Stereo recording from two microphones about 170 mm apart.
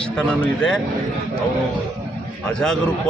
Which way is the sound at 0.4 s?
5° left (ahead or behind).